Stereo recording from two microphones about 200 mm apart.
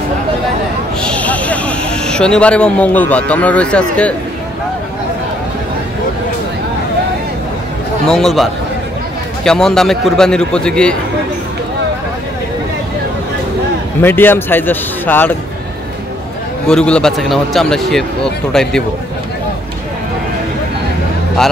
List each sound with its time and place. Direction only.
1.0 s speech: 5° left (ahead or behind)
8.1 s speech: centre (ahead or behind)
14.0 s speech: 10° left (ahead or behind)
16.6 s speech: 5° left (ahead or behind)